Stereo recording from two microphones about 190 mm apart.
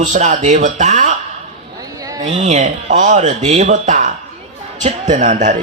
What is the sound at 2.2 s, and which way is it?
Speech, 35° right (ahead or behind).